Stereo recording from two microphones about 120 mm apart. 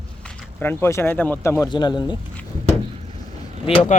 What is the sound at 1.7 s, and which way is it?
Speech, 40° left (ahead or behind).